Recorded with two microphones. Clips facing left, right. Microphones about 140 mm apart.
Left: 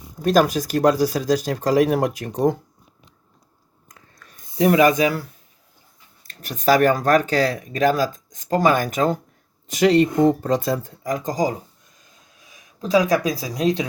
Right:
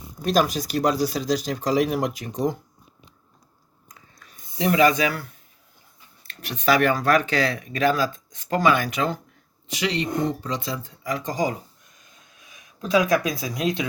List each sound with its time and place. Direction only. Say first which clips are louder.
0.3 s speech: left 4 dB; 50° left (ahead or behind)
3.8 s a sound: left 1 dB; 50° left (ahead or behind)
6.2 s speech: left 3 dB; 45° left (ahead or behind)
12.8 s speech: left 2 dB; 35° left (ahead or behind)